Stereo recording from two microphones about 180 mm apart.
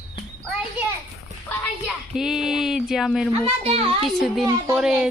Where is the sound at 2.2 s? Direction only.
5° right (ahead or behind).